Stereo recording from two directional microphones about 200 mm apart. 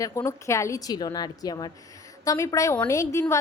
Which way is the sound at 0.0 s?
15° left (ahead or behind).